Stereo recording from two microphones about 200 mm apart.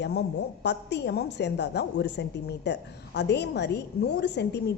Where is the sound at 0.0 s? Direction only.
60° left (ahead or behind).